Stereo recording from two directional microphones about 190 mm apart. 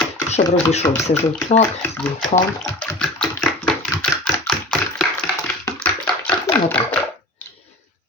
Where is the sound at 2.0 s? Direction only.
5° left (ahead or behind).